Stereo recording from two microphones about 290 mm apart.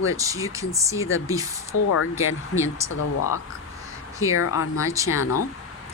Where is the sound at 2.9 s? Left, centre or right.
Left.